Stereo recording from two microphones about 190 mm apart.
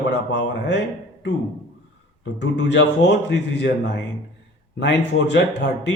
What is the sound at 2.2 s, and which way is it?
Speech, 70° left (ahead or behind).